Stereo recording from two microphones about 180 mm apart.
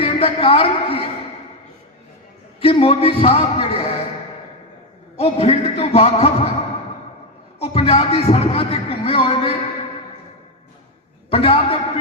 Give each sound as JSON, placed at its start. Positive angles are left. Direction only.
{"t": 0.0, "sound": "a woman's voice", "side_deg": 30}
{"t": 2.6, "sound": "a man's voice", "side_deg": 30}
{"t": 5.1, "sound": "a man's voice", "side_deg": 35}
{"t": 7.6, "sound": "a man's voice", "side_deg": 35}
{"t": 11.3, "sound": "a man's voice", "side_deg": 30}